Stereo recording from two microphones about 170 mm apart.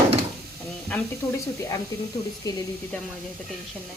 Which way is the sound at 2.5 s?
20° left (ahead or behind).